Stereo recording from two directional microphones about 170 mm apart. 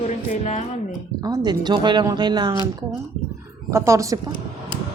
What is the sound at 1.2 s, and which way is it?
Speech, 25° right (ahead or behind).